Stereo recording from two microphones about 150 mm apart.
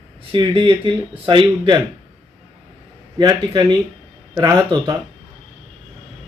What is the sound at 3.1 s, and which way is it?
Speech, 30° right (ahead or behind).